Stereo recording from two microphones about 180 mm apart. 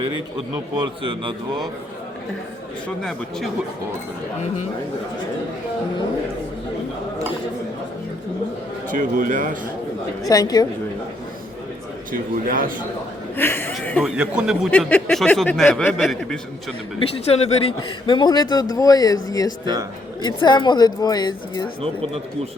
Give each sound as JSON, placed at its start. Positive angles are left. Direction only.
{"t": 0.8, "sound": "speech", "side_deg": -25}
{"t": 3.0, "sound": "speech", "side_deg": 5}
{"t": 8.9, "sound": "a man's voice", "side_deg": -50}
{"t": 10.2, "sound": "a man's voice", "side_deg": 20}
{"t": 12.1, "sound": "a man's voice", "side_deg": -50}
{"t": 13.3, "sound": "speech", "side_deg": 10}
{"t": 14.7, "sound": "speech", "side_deg": 10}
{"t": 17.2, "sound": "a man's voice", "side_deg": 35}